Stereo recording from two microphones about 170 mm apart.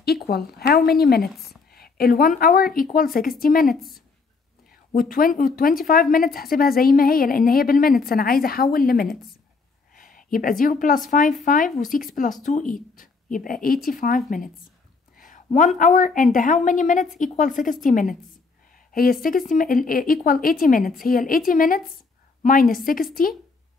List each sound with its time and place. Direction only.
0.0 s speech: 70° left (ahead or behind)
1.2 s speech: centre (ahead or behind)
1.7 s speech: 60° left (ahead or behind)
4.9 s a woman's voice: 55° left (ahead or behind)
19.2 s speech: 55° left (ahead or behind)